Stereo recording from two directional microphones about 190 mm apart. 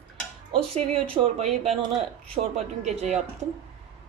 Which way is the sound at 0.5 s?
30° right (ahead or behind).